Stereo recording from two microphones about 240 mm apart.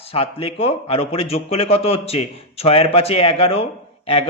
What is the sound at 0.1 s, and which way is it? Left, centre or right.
Speech, left.